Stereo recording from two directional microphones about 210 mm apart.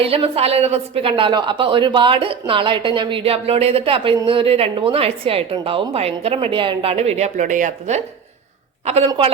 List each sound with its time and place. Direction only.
0.0 s a woman's voice: 25° right (ahead or behind)